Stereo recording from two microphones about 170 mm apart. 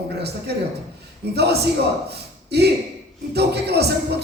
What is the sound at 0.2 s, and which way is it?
A man's voice, 75° right (ahead or behind).